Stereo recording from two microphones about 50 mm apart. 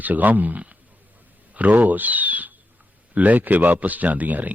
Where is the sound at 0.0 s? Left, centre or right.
Right.